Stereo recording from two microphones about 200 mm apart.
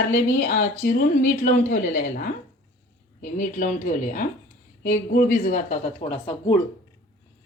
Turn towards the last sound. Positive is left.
turn(degrees=30)  # may be behind; listen again after turning